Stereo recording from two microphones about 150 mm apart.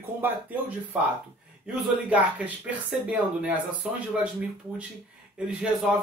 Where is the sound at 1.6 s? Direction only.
10° right (ahead or behind).